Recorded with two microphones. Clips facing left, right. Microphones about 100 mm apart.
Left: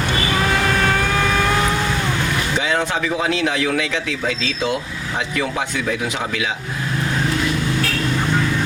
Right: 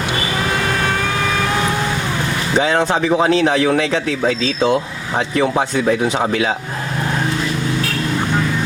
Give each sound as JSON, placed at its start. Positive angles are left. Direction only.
{"t": 2.6, "sound": "speech", "side_deg": -35}